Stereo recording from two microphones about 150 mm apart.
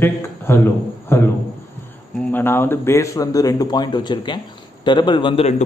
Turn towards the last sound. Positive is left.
turn(degrees=45)  # may be behind; listen again after turning